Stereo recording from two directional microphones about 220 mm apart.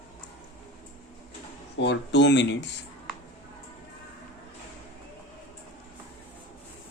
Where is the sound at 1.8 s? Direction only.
55° left (ahead or behind).